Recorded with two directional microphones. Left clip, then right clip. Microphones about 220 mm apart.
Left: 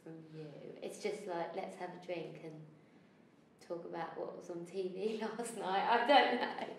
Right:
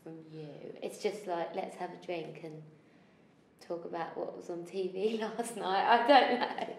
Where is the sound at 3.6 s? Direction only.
50° right (ahead or behind).